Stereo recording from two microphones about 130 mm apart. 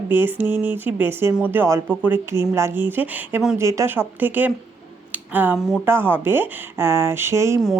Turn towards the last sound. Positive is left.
turn(degrees=-20)  # may be behind; listen again after turning